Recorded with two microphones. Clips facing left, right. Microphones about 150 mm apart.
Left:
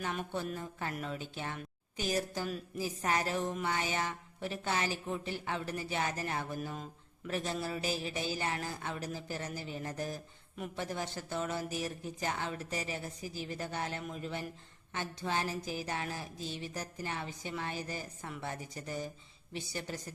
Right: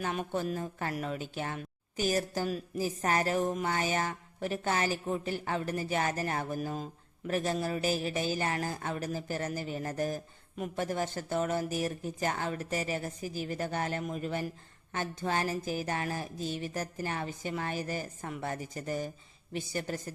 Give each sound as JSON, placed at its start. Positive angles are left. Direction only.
{"t": 0.0, "sound": "speech", "side_deg": -45}